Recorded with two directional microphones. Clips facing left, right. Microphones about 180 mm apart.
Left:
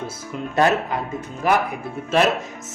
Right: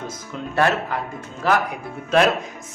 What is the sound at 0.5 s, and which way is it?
Speech, 20° left (ahead or behind).